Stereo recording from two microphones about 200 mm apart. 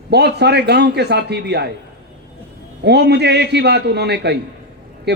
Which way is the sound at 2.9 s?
55° right (ahead or behind).